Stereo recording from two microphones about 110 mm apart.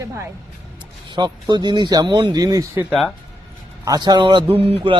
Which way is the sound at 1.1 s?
40° right (ahead or behind).